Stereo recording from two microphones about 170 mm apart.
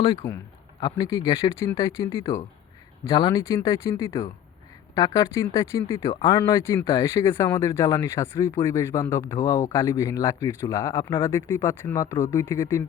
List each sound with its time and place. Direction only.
0.2 s speech: 15° left (ahead or behind)
3.1 s speech: 25° left (ahead or behind)
6.1 s speech: 30° left (ahead or behind)
6.4 s speech: 15° left (ahead or behind)